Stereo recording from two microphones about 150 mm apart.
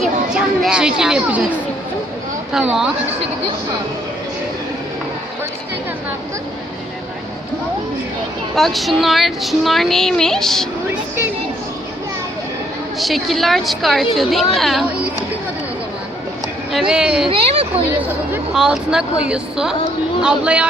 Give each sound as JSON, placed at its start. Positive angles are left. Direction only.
{"t": 0.3, "sound": "speech", "side_deg": -5}
{"t": 8.5, "sound": "speech", "side_deg": 0}
{"t": 13.0, "sound": "speech", "side_deg": 0}
{"t": 16.7, "sound": "speech", "side_deg": -5}
{"t": 17.2, "sound": "a child's voice", "side_deg": -40}
{"t": 18.5, "sound": "speech", "side_deg": -5}